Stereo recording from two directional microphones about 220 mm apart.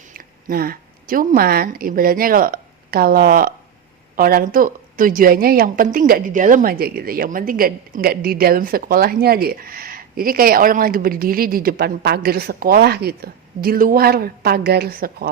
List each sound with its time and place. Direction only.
0.1 s a woman's voice: 40° right (ahead or behind)